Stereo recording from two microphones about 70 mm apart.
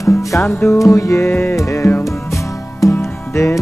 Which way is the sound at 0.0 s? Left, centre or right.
Left.